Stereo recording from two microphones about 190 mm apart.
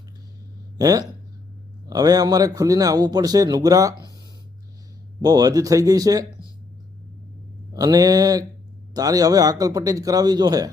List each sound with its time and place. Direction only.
0.8 s a man's voice: 20° right (ahead or behind)
5.2 s a man's voice: 20° right (ahead or behind)
7.7 s a man's voice: 20° right (ahead or behind)